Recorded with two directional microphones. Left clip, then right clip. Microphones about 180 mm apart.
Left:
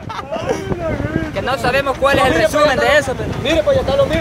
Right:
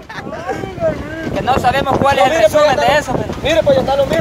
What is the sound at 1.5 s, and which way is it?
Speech, 35° right (ahead or behind).